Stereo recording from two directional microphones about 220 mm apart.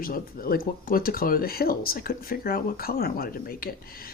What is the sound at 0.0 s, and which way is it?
Speech, 40° left (ahead or behind).